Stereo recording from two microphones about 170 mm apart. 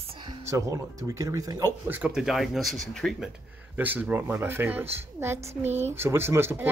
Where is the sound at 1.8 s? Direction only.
10° right (ahead or behind).